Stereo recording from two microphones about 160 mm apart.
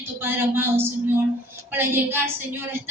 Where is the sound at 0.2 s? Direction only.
15° right (ahead or behind).